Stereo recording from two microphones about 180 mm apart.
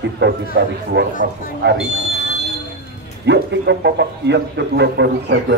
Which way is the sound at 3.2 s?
75° right (ahead or behind).